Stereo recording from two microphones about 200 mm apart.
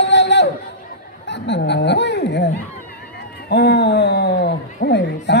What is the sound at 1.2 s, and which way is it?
Snicker, 60° left (ahead or behind).